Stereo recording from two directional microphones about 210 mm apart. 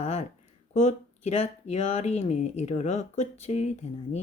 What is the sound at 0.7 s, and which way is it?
Speech, 35° left (ahead or behind).